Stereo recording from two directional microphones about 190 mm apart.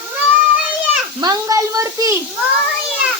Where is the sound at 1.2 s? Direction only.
20° right (ahead or behind).